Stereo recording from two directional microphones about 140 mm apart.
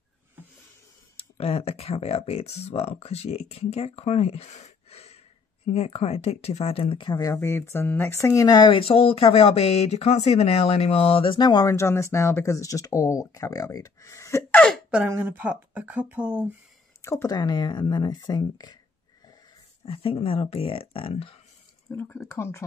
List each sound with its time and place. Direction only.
1.1 s speech: 50° left (ahead or behind); by 7.3 s 30° left (ahead or behind)
7.3 s speech: 20° left (ahead or behind)
14.9 s speech: 10° right (ahead or behind)
17.0 s speech: 20° left (ahead or behind)
19.8 s speech: 45° left (ahead or behind)
21.9 s speech: 15° left (ahead or behind)